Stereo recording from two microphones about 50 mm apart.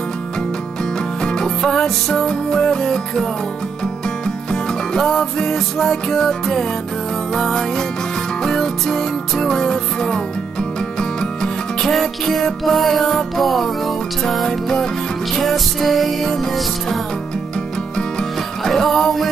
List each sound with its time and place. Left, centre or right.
1.2 s music: centre
4.5 s music: centre
15.3 s music: centre
18.6 s music: centre